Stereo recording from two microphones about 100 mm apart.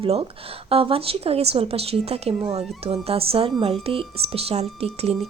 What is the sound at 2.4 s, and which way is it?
Speech, 75° right (ahead or behind).